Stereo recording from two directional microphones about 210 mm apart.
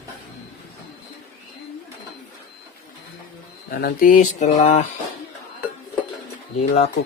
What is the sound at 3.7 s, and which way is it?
Speech, 45° left (ahead or behind).